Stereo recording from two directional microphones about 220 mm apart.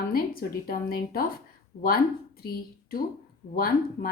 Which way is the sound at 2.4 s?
45° left (ahead or behind).